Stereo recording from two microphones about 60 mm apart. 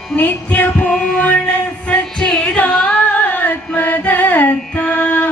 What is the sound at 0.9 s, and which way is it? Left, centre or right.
Music, centre.